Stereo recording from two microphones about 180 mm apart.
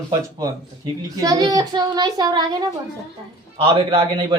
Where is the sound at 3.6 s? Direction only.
30° right (ahead or behind).